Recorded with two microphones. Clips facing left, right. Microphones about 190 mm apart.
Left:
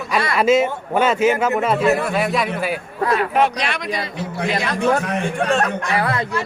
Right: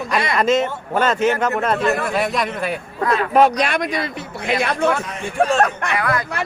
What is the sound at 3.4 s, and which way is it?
Speech, 45° right (ahead or behind).